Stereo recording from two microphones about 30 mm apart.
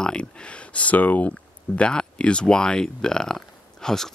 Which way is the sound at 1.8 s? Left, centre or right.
Left.